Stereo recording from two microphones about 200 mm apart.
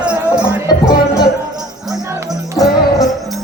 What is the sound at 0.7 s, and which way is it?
Music, 20° left (ahead or behind).